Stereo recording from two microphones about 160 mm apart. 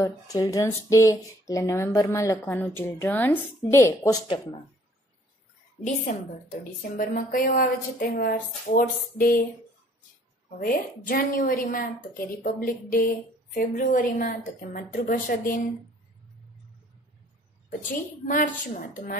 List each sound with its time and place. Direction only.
0.0 s speech: 20° left (ahead or behind)
6.1 s a woman's voice: 50° left (ahead or behind)
10.6 s a woman's voice: 65° left (ahead or behind)
14.3 s a woman's voice: 70° left (ahead or behind)
18.2 s a woman's voice: 55° left (ahead or behind)